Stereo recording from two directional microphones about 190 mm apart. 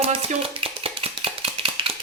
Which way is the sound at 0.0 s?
30° right (ahead or behind).